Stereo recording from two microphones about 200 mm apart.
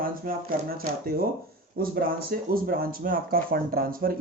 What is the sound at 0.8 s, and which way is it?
Speech, 45° right (ahead or behind).